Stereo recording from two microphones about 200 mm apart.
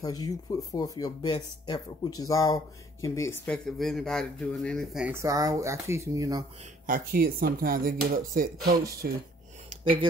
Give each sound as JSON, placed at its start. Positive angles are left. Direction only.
{"t": 0.0, "sound": "speech", "side_deg": 20}
{"t": 6.9, "sound": "speech", "side_deg": -50}